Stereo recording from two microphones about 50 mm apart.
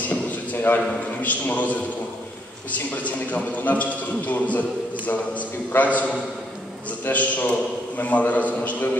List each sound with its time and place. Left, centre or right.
0.6 s a man's voice: left